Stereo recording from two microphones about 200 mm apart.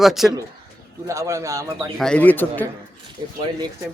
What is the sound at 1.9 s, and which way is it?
Speech, 5° left (ahead or behind).